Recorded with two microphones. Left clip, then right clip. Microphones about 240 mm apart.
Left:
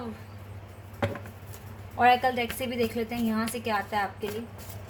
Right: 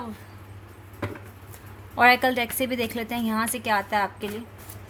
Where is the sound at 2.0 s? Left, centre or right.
Right.